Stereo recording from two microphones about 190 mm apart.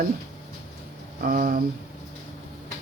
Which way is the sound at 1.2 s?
50° right (ahead or behind).